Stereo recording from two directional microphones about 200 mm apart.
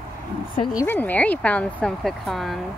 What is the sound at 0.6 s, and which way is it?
Speech, 15° left (ahead or behind).